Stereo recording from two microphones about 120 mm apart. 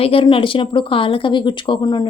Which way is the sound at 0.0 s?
50° left (ahead or behind).